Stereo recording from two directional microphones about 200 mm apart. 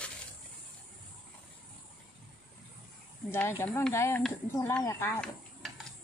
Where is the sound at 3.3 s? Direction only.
10° left (ahead or behind).